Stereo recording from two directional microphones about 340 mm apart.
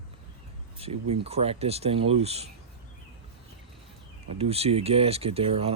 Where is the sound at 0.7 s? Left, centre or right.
Centre.